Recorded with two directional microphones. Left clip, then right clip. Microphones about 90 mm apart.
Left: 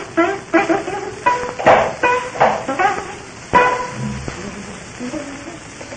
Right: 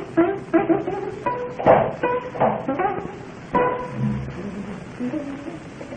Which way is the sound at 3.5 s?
25° right (ahead or behind).